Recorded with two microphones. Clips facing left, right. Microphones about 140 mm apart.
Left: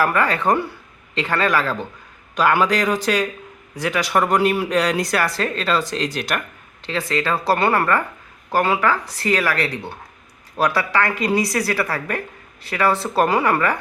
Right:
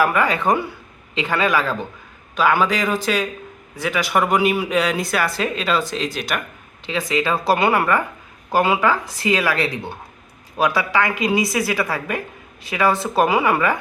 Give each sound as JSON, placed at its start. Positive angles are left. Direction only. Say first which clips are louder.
{"t": 0.0, "sound": "a woman's voice", "louder": "right 1 dB", "side_deg": -5}